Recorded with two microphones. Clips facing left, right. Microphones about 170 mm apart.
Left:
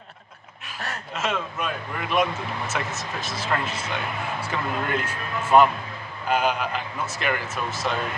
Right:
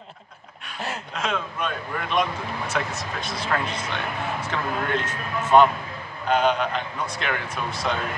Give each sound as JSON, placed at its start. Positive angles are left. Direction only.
{"t": 1.1, "sound": "speech", "side_deg": 5}